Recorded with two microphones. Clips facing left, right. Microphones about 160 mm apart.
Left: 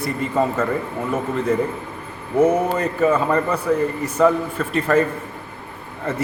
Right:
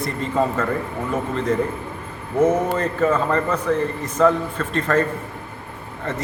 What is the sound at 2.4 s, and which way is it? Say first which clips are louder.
A man's voice: left 1 dB; 10° left (ahead or behind).